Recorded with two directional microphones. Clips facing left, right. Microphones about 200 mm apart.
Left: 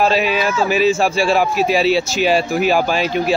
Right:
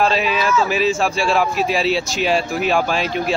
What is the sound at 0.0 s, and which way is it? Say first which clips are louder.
A man's voice: left 2 dB; centre (ahead or behind).